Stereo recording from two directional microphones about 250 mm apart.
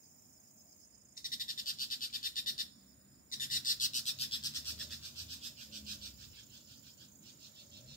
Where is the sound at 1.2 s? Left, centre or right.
Left.